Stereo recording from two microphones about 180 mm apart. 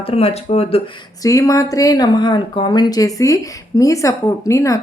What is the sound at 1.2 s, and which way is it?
Speech, 20° left (ahead or behind).